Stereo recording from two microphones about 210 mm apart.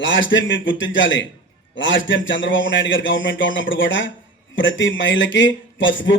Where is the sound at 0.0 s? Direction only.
60° left (ahead or behind).